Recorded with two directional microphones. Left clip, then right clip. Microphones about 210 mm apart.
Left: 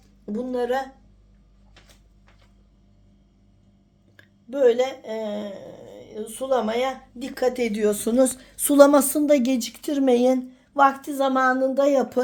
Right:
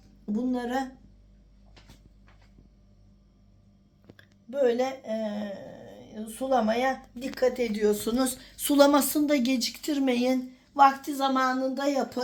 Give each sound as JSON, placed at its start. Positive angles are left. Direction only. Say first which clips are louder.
{"t": 0.3, "sound": "a woman's voice", "louder": "left 5 dB", "side_deg": 50}
{"t": 4.2, "sound": "a woman's voice", "louder": "left 6 dB", "side_deg": 40}